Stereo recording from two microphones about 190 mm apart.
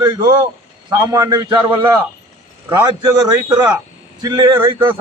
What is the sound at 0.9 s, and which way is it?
Speech, 20° right (ahead or behind).